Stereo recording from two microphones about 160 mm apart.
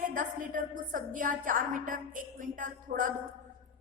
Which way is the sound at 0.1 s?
55° right (ahead or behind).